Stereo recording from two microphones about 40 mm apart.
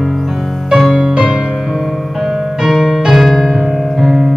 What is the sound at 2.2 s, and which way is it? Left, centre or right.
Music, centre.